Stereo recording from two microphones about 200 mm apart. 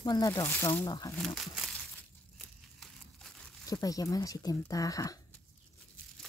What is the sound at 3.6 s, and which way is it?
Speech, 15° left (ahead or behind).